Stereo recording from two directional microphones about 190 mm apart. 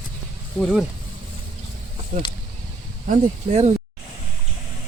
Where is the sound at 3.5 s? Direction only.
35° right (ahead or behind).